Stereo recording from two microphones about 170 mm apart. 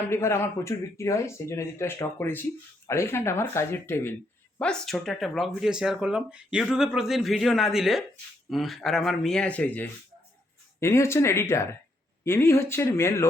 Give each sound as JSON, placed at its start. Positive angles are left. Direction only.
{"t": 0.1, "sound": "speech", "side_deg": 15}